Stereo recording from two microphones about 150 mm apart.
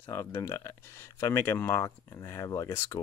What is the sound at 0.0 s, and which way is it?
Speech, 15° left (ahead or behind).